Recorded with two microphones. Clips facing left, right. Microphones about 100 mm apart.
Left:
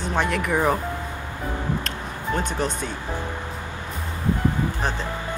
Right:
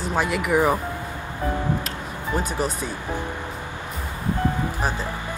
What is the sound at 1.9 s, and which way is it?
Music, 5° right (ahead or behind).